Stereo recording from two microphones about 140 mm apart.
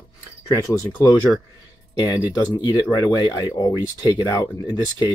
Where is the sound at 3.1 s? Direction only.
30° left (ahead or behind).